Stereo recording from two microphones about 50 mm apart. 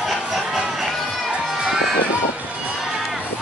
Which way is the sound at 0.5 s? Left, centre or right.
Centre.